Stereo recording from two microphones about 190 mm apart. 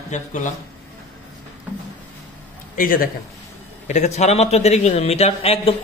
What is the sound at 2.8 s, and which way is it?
Speech, 50° left (ahead or behind).